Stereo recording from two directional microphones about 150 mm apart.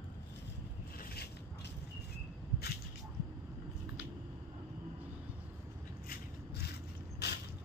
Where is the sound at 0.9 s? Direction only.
90° left.